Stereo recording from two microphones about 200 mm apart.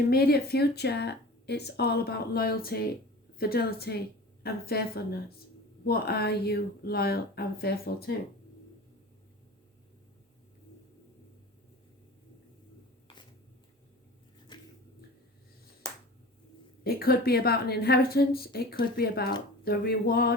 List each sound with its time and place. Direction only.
0.1 s speech: 50° left (ahead or behind)
14.5 s a sound: 20° left (ahead or behind)
15.8 s finger snapping: 15° left (ahead or behind)
16.8 s speech: 50° left (ahead or behind)